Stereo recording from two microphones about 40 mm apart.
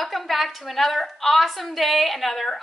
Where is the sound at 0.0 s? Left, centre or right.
Centre.